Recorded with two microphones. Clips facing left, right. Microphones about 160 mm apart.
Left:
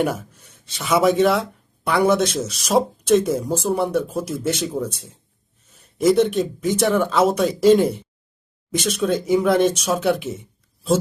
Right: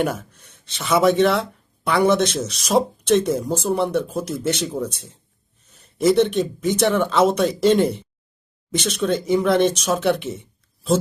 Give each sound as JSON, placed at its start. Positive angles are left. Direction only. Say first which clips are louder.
{"t": 0.0, "sound": "speech", "louder": "left 1 dB", "side_deg": 5}